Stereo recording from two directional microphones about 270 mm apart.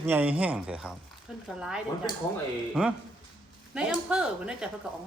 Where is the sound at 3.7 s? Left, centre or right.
Centre.